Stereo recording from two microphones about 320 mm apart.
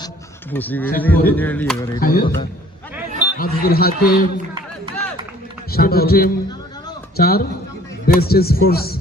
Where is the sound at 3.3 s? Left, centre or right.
Left.